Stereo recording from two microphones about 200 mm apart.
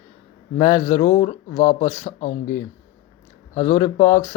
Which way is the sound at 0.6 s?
20° left (ahead or behind).